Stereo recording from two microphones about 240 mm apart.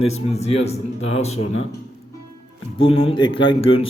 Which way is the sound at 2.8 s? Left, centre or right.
Left.